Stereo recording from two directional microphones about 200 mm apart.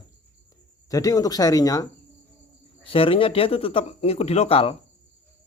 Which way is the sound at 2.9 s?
25° left (ahead or behind).